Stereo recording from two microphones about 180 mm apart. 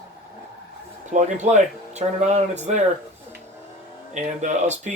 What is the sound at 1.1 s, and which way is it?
Speech, 40° right (ahead or behind).